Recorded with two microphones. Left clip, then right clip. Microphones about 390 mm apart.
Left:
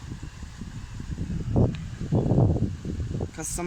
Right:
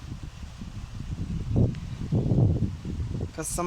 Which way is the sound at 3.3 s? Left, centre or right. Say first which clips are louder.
Right 5 dB; centre.